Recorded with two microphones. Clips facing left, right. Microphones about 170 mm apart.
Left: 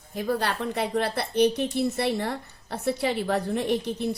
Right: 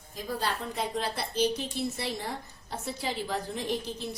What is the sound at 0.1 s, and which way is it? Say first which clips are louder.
A woman's voice: left 6 dB; 65° left (ahead or behind).